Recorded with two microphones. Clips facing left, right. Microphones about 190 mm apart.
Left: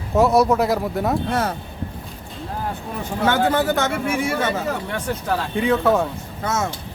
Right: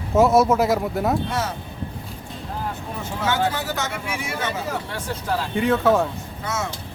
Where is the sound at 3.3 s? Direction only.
55° left (ahead or behind).